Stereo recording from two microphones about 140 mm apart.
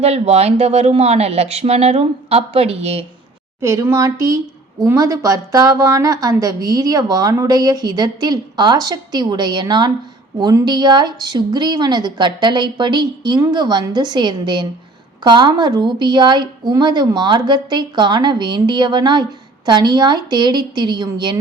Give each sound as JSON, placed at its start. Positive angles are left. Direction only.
{"t": 0.0, "sound": "speech", "side_deg": -50}
{"t": 3.6, "sound": "a woman's voice", "side_deg": -20}